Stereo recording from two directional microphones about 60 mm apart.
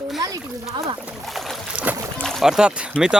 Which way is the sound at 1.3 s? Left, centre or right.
Centre.